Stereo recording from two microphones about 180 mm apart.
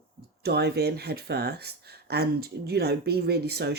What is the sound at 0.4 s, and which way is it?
Speech, 65° right (ahead or behind).